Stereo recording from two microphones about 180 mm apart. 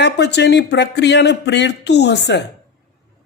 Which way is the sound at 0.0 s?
70° left (ahead or behind).